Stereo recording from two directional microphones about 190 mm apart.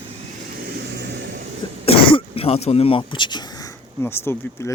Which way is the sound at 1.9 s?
30° left (ahead or behind).